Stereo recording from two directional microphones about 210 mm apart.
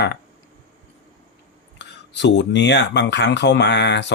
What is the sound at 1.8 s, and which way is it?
Speech, 55° left (ahead or behind).